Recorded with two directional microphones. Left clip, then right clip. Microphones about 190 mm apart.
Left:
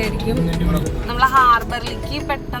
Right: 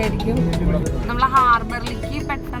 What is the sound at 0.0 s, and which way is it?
Speech, centre (ahead or behind).